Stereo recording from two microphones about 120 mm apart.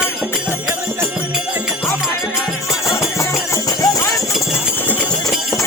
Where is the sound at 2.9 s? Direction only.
25° left (ahead or behind).